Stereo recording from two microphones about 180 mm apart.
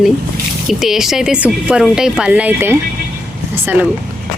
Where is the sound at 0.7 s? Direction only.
Centre (ahead or behind).